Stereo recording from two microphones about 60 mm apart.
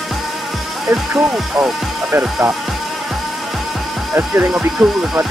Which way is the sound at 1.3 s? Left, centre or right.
Centre.